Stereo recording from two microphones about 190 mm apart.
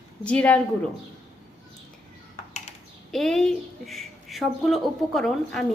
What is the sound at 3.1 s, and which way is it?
Speech, centre (ahead or behind).